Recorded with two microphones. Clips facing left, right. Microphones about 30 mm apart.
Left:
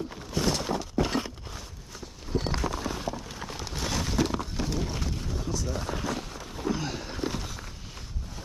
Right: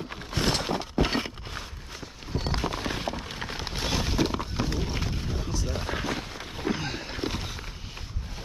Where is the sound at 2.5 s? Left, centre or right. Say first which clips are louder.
Right 1 dB; right.